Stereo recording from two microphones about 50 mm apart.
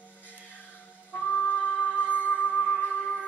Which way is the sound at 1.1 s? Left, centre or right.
Left.